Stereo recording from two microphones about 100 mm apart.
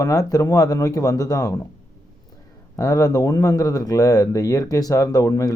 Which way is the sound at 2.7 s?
35° left (ahead or behind).